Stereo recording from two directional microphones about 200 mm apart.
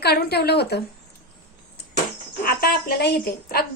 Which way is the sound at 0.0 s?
55° left (ahead or behind).